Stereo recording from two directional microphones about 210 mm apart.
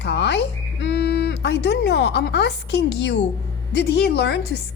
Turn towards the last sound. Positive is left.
turn(degrees=55)  # may be behind; listen again after turning